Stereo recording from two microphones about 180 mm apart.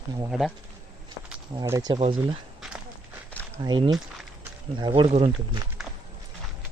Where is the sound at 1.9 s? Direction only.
30° right (ahead or behind).